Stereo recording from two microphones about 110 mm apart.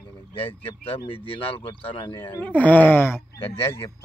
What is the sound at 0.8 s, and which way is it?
Speech, 55° left (ahead or behind).